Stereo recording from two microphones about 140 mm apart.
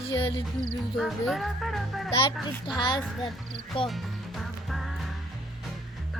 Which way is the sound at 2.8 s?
30° left (ahead or behind).